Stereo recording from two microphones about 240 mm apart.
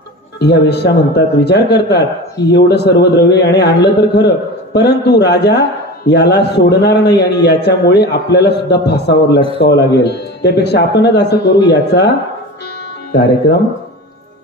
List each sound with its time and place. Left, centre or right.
0.4 s a man's voice: left